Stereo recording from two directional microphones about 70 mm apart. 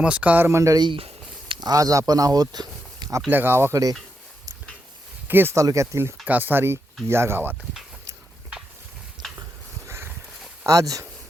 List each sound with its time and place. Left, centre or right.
0.0 s speech: centre
0.5 s speech: right
1.5 s speech: right
3.2 s speech: right
3.7 s speech: right
5.3 s speech: right
5.5 s speech: right
6.2 s speech: right
9.8 s a sound: right
10.7 s speech: right